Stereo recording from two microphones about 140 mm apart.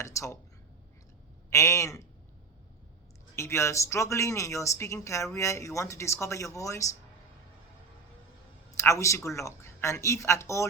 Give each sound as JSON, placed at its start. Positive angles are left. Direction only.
{"t": 0.0, "sound": "speech", "side_deg": 20}
{"t": 1.5, "sound": "speech", "side_deg": 20}
{"t": 3.3, "sound": "speech", "side_deg": 20}
{"t": 8.7, "sound": "speech", "side_deg": 20}